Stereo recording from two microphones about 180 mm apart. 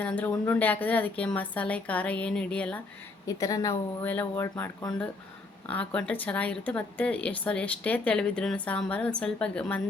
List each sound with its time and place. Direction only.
0.0 s a woman's voice: 10° left (ahead or behind)
3.2 s a woman's voice: 20° left (ahead or behind)